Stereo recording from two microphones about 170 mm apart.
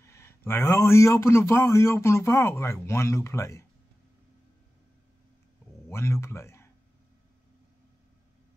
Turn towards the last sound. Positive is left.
turn(degrees=15)  # may be behind; listen again after turning